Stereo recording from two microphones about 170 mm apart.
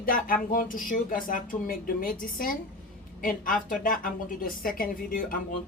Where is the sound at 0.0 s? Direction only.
55° left (ahead or behind).